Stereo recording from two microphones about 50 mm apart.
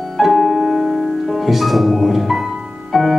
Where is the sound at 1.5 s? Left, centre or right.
Centre.